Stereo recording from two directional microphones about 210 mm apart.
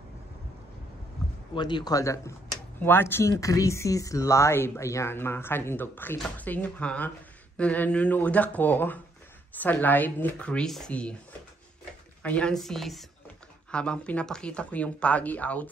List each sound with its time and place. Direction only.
1.5 s speech: 20° left (ahead or behind); by 11.1 s 5° left (ahead or behind)
12.2 s speech: 5° left (ahead or behind)